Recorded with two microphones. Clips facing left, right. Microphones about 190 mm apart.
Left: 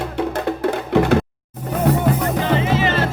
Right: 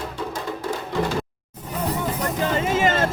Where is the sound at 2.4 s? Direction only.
45° right (ahead or behind).